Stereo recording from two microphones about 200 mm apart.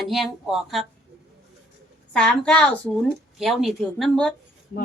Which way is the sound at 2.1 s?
5° left (ahead or behind).